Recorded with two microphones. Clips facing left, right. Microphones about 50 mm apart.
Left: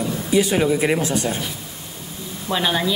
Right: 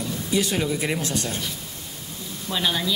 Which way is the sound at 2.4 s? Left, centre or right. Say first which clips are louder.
Left 4 dB; centre.